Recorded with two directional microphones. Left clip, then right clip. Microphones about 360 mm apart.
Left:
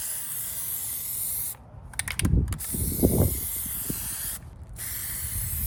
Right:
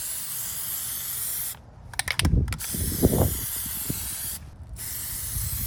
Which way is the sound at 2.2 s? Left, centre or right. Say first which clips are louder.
Right 2 dB; centre.